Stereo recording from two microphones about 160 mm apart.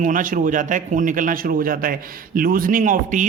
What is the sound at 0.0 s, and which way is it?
A man's voice, 55° right (ahead or behind).